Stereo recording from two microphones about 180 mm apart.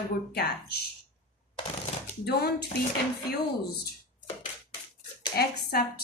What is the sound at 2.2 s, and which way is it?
Speech, 65° left (ahead or behind).